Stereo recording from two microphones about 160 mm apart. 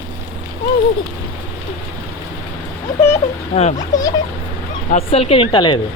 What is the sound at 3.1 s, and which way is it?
A woman's voice, 45° left (ahead or behind).